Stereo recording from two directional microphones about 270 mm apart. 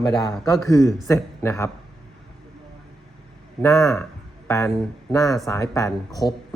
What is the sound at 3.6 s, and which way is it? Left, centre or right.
Speech, centre.